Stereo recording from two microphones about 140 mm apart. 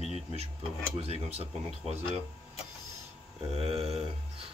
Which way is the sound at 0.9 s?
45° right (ahead or behind).